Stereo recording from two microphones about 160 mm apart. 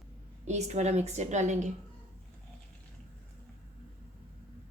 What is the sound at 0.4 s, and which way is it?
A woman's voice, 45° right (ahead or behind).